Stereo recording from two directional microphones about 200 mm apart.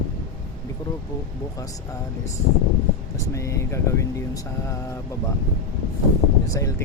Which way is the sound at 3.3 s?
15° left (ahead or behind).